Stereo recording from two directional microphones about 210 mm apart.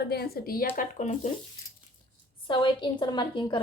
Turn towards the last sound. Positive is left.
turn(degrees=20)  # may be behind; listen again after turning